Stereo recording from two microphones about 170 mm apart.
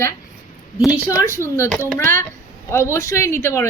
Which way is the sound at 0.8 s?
10° right (ahead or behind).